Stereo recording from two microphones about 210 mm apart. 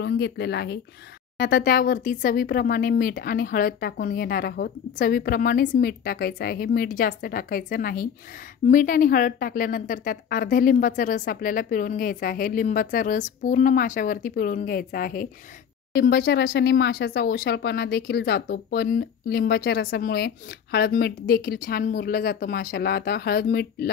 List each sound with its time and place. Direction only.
0.0 s a woman's voice: 50° left (ahead or behind)